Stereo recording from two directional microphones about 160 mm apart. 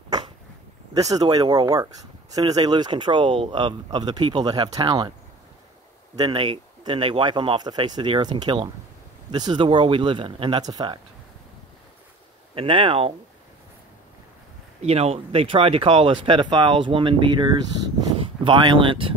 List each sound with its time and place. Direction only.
0.9 s speech: 20° right (ahead or behind)
6.1 s speech: 25° right (ahead or behind)
12.5 s speech: 35° right (ahead or behind)
14.8 s speech: 40° right (ahead or behind)